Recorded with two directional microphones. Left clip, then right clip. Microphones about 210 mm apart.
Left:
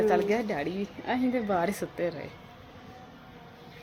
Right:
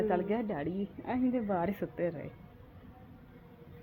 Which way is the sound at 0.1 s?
10° left (ahead or behind).